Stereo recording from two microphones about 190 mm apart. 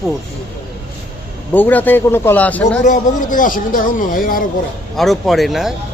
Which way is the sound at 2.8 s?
45° left (ahead or behind).